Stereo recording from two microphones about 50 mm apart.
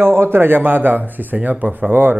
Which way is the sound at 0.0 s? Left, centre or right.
Right.